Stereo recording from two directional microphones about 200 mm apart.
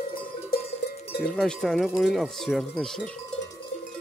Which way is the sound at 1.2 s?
Centre (ahead or behind).